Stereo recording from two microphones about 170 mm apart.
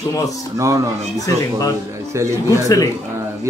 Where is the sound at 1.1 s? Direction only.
20° left (ahead or behind).